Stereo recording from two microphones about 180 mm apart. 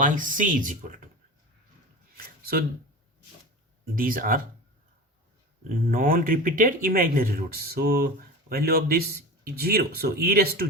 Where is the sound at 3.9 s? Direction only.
50° right (ahead or behind).